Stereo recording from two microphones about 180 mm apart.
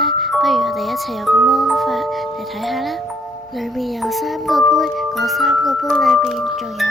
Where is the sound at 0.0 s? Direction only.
Centre (ahead or behind).